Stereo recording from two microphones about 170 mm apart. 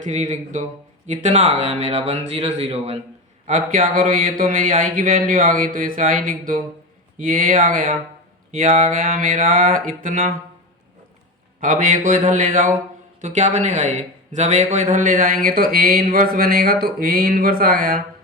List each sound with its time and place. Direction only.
0.0 s speech: 45° right (ahead or behind)
3.4 s speech: 50° right (ahead or behind)
11.6 s a man's voice: 50° right (ahead or behind)